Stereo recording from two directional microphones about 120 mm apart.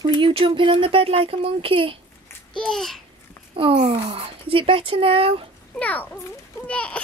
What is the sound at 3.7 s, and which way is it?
Speech, 50° right (ahead or behind).